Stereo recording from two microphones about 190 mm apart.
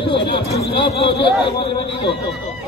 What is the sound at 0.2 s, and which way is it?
Speech, 60° left (ahead or behind).